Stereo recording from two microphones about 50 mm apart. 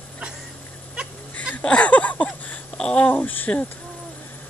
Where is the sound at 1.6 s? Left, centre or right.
Left.